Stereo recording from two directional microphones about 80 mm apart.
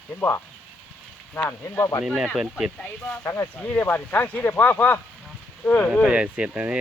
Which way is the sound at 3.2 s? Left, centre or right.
Left.